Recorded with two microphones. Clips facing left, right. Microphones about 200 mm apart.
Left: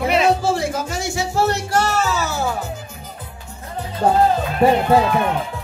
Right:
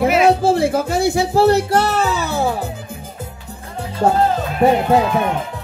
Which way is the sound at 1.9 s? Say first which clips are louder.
Right 2 dB; 60° right (ahead or behind).